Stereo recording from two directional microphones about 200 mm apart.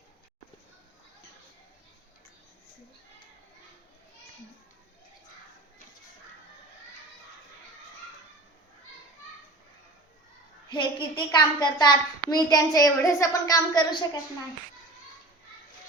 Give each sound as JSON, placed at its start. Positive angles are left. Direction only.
{"t": 10.7, "sound": "a woman's voice", "side_deg": 25}